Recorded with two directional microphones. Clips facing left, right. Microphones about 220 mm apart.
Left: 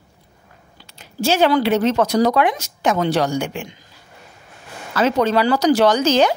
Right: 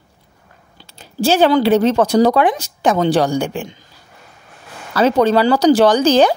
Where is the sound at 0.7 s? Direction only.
30° right (ahead or behind).